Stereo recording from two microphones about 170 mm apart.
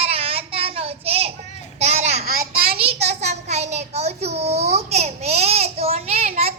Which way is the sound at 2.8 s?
35° right (ahead or behind).